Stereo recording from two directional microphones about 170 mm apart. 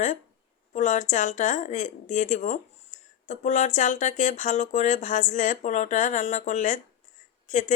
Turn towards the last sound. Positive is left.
turn(degrees=45)  # may be behind; listen again after turning